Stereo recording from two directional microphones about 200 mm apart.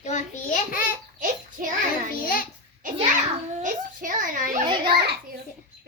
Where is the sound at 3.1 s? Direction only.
40° right (ahead or behind).